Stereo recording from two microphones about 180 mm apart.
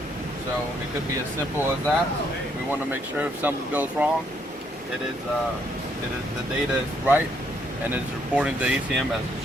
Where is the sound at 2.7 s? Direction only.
10° right (ahead or behind).